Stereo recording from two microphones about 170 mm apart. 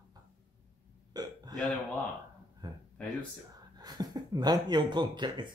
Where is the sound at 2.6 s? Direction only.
25° right (ahead or behind).